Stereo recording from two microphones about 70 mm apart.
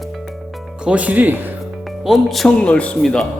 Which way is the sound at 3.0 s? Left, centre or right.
Centre.